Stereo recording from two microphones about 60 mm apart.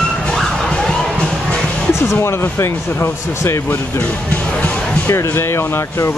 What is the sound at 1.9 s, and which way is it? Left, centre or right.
Speech, left.